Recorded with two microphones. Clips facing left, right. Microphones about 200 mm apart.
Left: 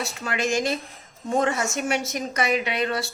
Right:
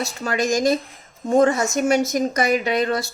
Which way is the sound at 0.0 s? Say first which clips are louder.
Right 4 dB; 40° right (ahead or behind).